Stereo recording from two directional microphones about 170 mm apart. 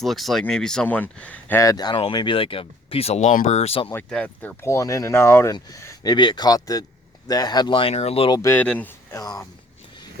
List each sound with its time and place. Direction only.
0.0 s speech: centre (ahead or behind); by 3.9 s 35° left (ahead or behind)
3.9 s speech: 10° left (ahead or behind); by 8.4 s 35° left (ahead or behind)
8.4 s speech: 15° left (ahead or behind)